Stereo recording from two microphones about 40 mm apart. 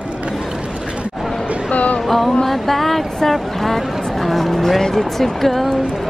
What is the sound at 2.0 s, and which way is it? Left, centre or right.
Speech, centre.